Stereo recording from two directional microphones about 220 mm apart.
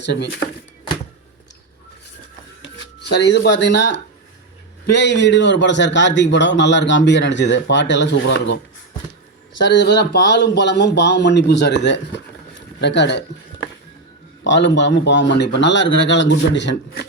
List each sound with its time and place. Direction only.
0.0 s speech: 50° left (ahead or behind)
2.6 s speech: 50° left (ahead or behind)
9.6 s speech: 50° left (ahead or behind)